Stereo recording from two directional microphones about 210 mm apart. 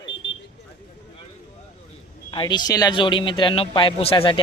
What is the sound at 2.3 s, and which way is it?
A man's voice, 20° left (ahead or behind).